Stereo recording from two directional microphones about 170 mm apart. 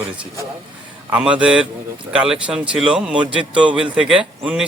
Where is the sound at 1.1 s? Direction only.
5° right (ahead or behind).